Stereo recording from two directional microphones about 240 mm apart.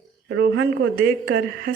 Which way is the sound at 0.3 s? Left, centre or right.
Right.